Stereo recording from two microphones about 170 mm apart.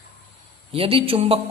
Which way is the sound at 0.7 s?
35° right (ahead or behind).